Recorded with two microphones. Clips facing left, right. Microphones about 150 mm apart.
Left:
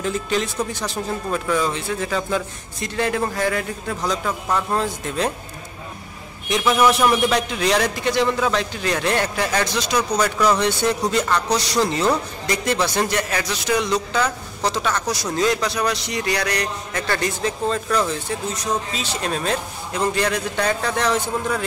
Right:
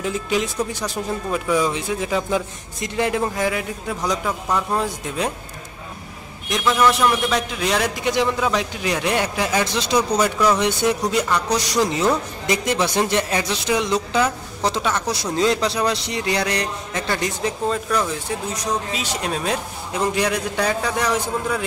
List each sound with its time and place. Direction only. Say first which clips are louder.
0.0 s speech: even; 10° right (ahead or behind)
6.5 s a man's voice: left 1 dB; 5° left (ahead or behind); by 14.2 s 20° right (ahead or behind)
14.6 s a sound: right 1 dB; 20° right (ahead or behind)
15.3 s speech: right 2 dB; 25° right (ahead or behind); by 21.6 s 10° right (ahead or behind)